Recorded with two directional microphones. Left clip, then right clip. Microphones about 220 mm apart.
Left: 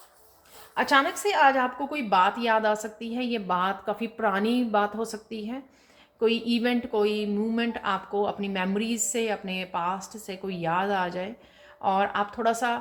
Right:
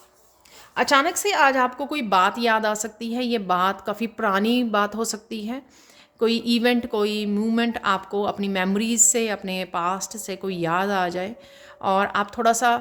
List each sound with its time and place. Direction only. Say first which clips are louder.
0.7 s speech: right 3 dB; 50° right (ahead or behind)